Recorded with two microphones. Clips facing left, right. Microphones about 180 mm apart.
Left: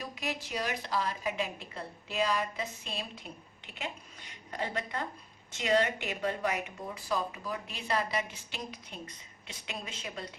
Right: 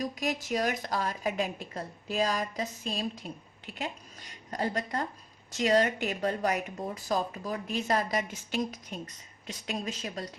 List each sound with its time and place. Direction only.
0.0 s speech: 40° right (ahead or behind)
4.5 s speech: 40° right (ahead or behind)